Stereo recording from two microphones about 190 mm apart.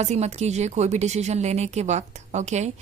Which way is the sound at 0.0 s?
35° right (ahead or behind).